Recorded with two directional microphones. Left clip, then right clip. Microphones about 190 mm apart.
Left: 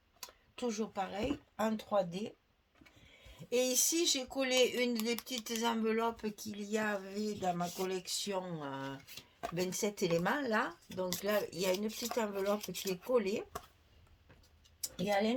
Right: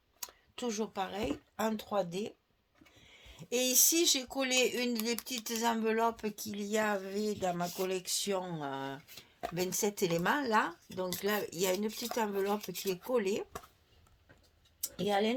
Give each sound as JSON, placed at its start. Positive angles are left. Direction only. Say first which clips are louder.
{"t": 0.2, "sound": "speech", "louder": "even", "side_deg": -40}
{"t": 3.3, "sound": "speech", "louder": "right 2 dB", "side_deg": -45}
{"t": 11.9, "sound": "speech", "louder": "right 1 dB", "side_deg": 5}
{"t": 12.1, "sound": "speech", "louder": "right 2 dB", "side_deg": -45}
{"t": 12.5, "sound": "speech", "louder": "right 2 dB", "side_deg": 5}
{"t": 13.1, "sound": "speech", "louder": "even", "side_deg": -45}
{"t": 15.0, "sound": "speech", "louder": "right 2 dB", "side_deg": -40}